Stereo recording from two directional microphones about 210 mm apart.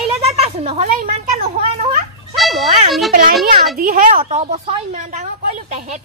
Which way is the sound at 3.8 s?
40° right (ahead or behind).